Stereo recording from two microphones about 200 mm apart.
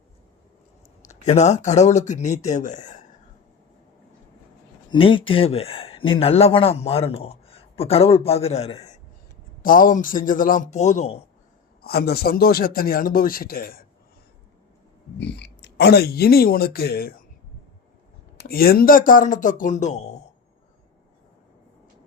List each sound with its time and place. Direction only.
1.0 s speech: 35° left (ahead or behind)
4.9 s speech: 25° left (ahead or behind)
9.6 s speech: 45° left (ahead or behind)
11.8 s speech: 50° left (ahead or behind)
15.2 s speech: 55° left (ahead or behind)
18.3 s speech: 50° left (ahead or behind)